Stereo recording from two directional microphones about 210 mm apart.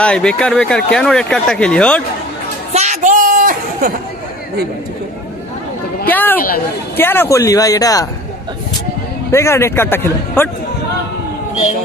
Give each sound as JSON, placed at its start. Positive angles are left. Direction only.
{"t": 0.0, "sound": "speech", "side_deg": 5}
{"t": 2.7, "sound": "a sound", "side_deg": -35}
{"t": 6.0, "sound": "a man's voice", "side_deg": 10}
{"t": 9.3, "sound": "a man's voice", "side_deg": 15}